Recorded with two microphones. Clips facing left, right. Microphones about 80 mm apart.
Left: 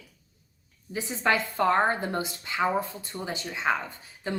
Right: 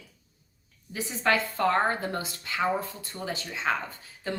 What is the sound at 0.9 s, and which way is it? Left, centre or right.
A woman's voice, left.